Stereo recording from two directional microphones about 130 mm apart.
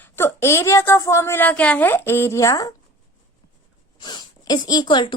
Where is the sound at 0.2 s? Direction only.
20° left (ahead or behind).